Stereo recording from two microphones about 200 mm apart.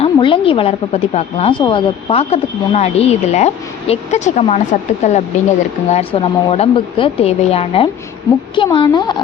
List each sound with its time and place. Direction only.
0.0 s a woman's voice: 25° left (ahead or behind)